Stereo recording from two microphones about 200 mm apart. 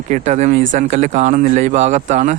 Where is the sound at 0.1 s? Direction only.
35° right (ahead or behind).